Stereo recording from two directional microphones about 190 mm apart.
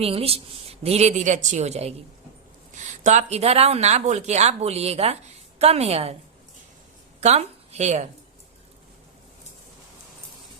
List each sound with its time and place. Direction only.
0.0 s speech: 30° right (ahead or behind)
7.2 s a woman's voice: 35° right (ahead or behind)